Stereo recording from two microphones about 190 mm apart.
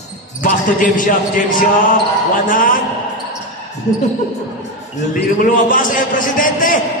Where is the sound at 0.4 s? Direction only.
45° left (ahead or behind).